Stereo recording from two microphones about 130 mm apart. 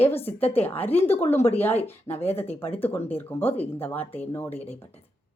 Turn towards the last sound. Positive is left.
turn(degrees=15)  # may be behind; listen again after turning